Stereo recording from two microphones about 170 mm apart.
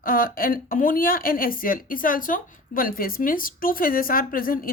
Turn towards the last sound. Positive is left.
turn(degrees=55)  # may be behind; listen again after turning